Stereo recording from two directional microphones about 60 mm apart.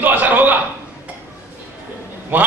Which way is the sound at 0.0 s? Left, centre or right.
Right.